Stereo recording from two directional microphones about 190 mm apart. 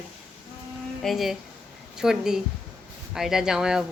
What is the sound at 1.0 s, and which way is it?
Speech, centre (ahead or behind).